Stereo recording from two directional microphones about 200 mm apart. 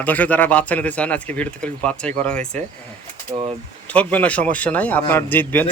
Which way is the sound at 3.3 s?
30° right (ahead or behind).